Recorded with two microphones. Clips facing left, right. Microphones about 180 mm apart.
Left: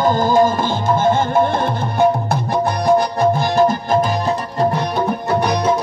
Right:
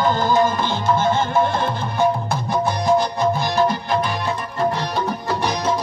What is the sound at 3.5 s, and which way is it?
Music, 45° left (ahead or behind).